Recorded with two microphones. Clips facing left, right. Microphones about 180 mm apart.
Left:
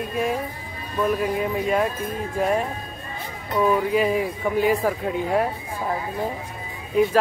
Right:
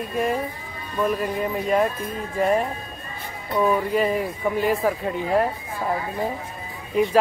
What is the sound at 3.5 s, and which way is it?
Speech, centre (ahead or behind).